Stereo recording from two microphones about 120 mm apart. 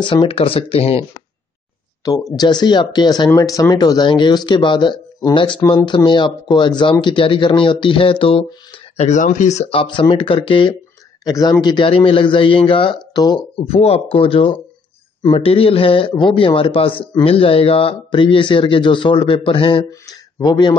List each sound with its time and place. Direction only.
0.0 s speech: 45° left (ahead or behind)
2.3 s speech: 35° left (ahead or behind)
5.6 s speech: 30° left (ahead or behind)
6.0 s speech: 40° left (ahead or behind)
11.2 s speech: 30° left (ahead or behind)
11.6 s speech: 40° left (ahead or behind)
13.7 s speech: 55° left (ahead or behind)
19.8 s speech: 30° left (ahead or behind)